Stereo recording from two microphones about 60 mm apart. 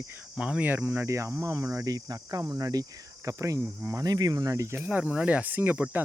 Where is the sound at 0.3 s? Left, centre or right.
Centre.